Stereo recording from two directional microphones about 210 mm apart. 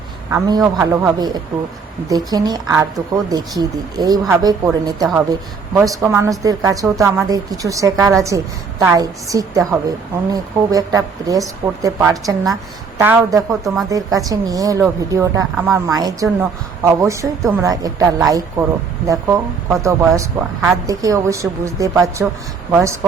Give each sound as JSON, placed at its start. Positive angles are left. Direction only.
{"t": 0.3, "sound": "speech", "side_deg": -15}
{"t": 6.1, "sound": "a woman's voice", "side_deg": -15}
{"t": 13.9, "sound": "speech", "side_deg": -15}